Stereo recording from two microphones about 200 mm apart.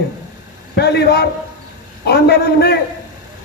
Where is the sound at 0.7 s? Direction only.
55° left (ahead or behind).